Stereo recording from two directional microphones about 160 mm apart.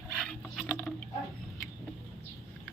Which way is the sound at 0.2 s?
Centre (ahead or behind).